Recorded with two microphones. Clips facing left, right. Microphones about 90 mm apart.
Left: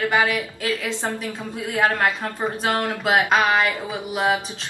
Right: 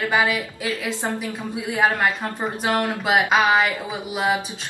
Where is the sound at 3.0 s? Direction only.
5° right (ahead or behind).